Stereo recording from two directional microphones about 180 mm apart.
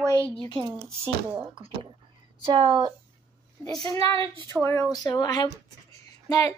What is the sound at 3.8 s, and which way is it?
A child's voice, 20° left (ahead or behind).